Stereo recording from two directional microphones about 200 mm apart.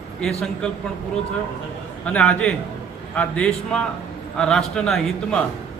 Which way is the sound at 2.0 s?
5° left (ahead or behind).